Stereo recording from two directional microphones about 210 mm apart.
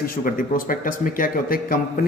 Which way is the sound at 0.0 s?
40° left (ahead or behind).